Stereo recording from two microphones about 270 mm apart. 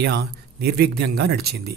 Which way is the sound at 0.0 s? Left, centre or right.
Right.